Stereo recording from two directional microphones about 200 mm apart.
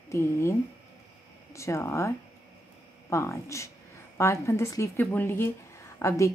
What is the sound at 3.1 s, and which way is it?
A woman's voice, 15° left (ahead or behind).